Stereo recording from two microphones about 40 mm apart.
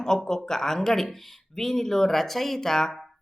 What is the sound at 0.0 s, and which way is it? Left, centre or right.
Speech, centre.